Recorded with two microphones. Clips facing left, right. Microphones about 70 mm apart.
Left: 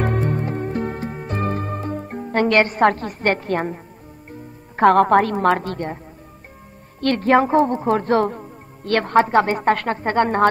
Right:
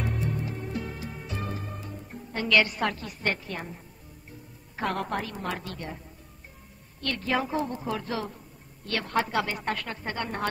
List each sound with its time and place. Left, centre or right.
0.0 s music: left
4.3 s a woman's voice: left
7.0 s speech: left